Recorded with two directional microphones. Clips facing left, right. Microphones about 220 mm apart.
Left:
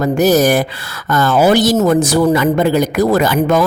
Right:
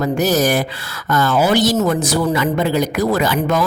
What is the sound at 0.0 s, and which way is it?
A woman's voice, 50° left (ahead or behind).